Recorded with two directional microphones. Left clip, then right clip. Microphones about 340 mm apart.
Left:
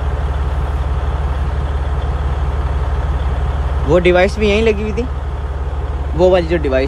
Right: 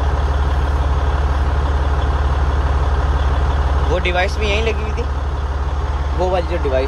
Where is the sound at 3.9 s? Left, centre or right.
Centre.